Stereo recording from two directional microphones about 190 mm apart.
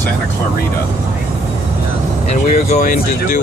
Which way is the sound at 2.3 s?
40° left (ahead or behind).